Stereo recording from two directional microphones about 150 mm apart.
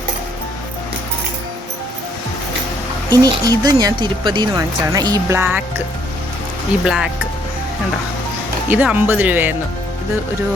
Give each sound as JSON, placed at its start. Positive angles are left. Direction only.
{"t": 3.1, "sound": "speech", "side_deg": -25}
{"t": 6.8, "sound": "speech", "side_deg": -5}
{"t": 8.7, "sound": "speech", "side_deg": -10}